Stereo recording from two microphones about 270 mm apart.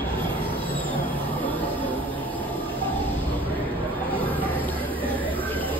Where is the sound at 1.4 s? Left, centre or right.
Centre.